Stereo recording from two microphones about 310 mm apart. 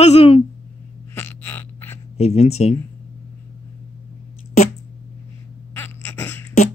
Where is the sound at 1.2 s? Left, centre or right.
Centre.